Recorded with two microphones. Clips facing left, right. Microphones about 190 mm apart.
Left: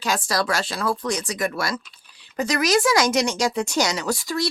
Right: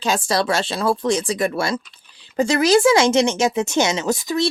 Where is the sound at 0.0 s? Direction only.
25° right (ahead or behind).